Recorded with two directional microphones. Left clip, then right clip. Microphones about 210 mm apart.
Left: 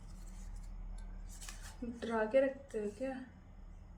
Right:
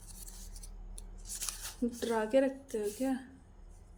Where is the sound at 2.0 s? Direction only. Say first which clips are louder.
Right 2 dB; 45° right (ahead or behind).